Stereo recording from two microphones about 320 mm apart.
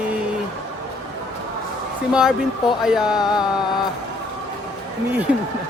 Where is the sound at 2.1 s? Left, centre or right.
Centre.